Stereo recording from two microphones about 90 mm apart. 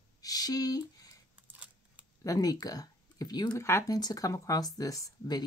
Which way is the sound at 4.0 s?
45° left (ahead or behind).